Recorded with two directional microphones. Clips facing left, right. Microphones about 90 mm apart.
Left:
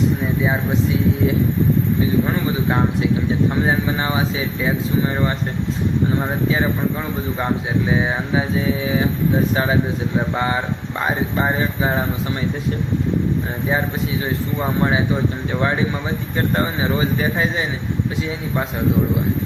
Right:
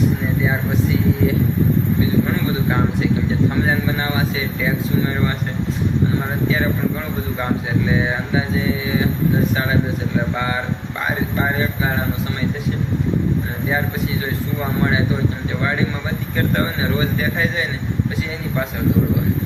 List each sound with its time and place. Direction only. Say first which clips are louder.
4.0 s speech: even; 30° left (ahead or behind)
7.9 s speech: even; 25° left (ahead or behind)
10.3 s speech: left 1 dB; 30° left (ahead or behind)
14.8 s speech: even; 30° left (ahead or behind)
16.6 s speech: left 2 dB; 25° left (ahead or behind)